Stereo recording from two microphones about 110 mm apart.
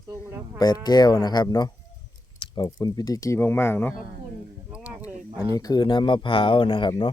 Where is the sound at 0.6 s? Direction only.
40° left (ahead or behind).